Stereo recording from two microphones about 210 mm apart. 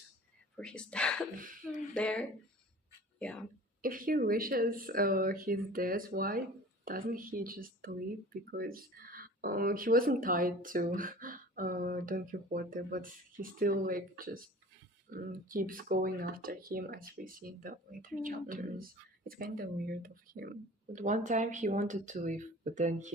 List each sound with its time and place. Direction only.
0.5 s speech: 5° left (ahead or behind)
3.8 s speech: 40° right (ahead or behind)